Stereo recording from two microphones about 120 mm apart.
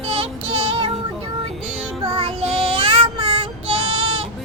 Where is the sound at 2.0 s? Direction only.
45° right (ahead or behind).